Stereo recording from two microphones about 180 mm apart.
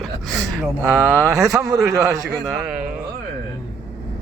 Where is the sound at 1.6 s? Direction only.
Centre (ahead or behind).